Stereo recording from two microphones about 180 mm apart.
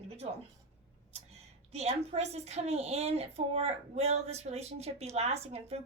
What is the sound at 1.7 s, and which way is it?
A woman's voice, 35° right (ahead or behind).